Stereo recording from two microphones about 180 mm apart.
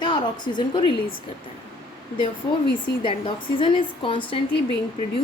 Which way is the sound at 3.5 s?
30° left (ahead or behind).